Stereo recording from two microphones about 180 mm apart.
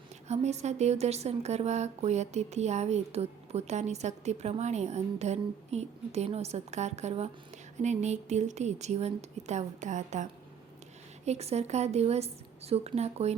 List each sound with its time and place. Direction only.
0.3 s a woman's voice: 40° right (ahead or behind)
11.3 s a woman's voice: 35° right (ahead or behind)